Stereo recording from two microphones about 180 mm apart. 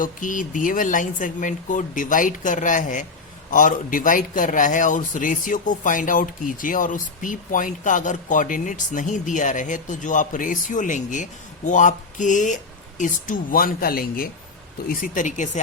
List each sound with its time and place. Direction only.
0.0 s a man's voice: 45° left (ahead or behind)